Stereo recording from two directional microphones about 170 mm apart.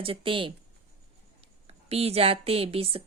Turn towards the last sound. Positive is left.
turn(degrees=-35)  # may be behind; listen again after turning